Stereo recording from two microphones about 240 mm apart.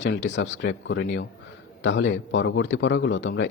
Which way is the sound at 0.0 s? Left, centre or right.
Left.